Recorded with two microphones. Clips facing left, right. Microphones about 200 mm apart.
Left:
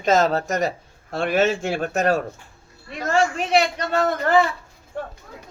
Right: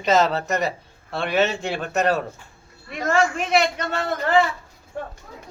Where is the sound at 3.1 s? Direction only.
35° left (ahead or behind).